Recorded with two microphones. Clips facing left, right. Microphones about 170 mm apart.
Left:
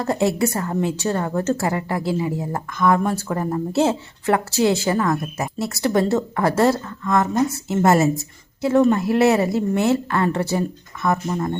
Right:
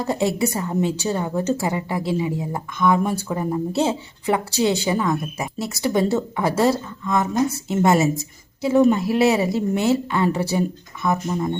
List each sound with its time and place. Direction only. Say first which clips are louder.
0.0 s a woman's voice: left 1 dB; centre (ahead or behind)